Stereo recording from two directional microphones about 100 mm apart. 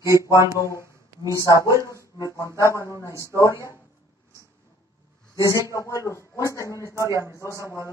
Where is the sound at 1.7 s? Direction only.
35° left (ahead or behind).